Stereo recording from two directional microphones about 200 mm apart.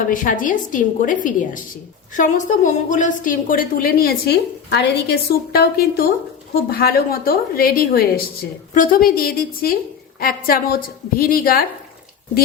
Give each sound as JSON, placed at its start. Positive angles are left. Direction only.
{"t": 0.1, "sound": "a woman's voice", "side_deg": 40}